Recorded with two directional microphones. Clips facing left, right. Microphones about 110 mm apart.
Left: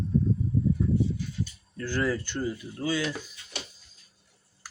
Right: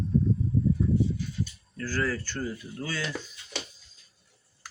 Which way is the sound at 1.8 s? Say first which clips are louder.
Left 2 dB; 20° left (ahead or behind).